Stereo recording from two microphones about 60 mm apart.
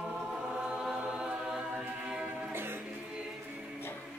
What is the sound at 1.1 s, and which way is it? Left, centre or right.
A capella, centre.